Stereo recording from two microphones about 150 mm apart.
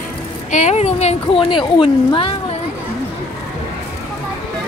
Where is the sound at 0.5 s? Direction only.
50° left (ahead or behind).